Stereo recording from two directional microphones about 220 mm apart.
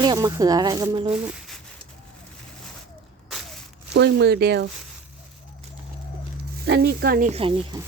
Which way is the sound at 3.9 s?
50° right (ahead or behind).